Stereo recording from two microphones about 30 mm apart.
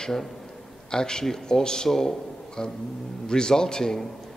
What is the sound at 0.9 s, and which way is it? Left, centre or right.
A man's voice, left.